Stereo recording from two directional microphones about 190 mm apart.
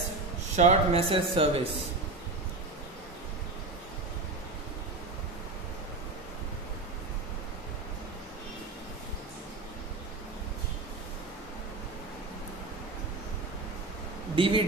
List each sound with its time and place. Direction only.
0.6 s speech: 35° right (ahead or behind)
14.3 s a man's voice: 25° right (ahead or behind)